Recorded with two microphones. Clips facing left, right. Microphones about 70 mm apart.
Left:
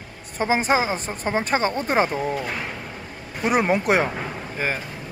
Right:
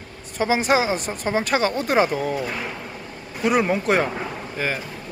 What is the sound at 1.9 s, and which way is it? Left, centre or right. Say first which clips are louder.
Speech: right 2 dB; centre.